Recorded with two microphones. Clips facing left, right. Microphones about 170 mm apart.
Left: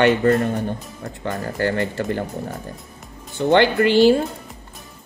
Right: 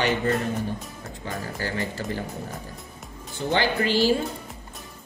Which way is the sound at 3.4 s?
60° left (ahead or behind).